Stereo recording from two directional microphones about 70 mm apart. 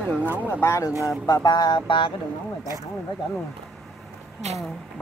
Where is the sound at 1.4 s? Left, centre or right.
Left.